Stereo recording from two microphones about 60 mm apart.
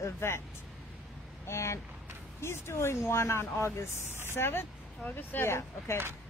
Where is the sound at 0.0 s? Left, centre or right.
Left.